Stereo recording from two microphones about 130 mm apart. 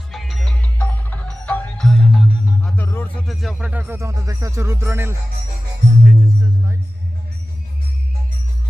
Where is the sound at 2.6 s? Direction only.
15° left (ahead or behind).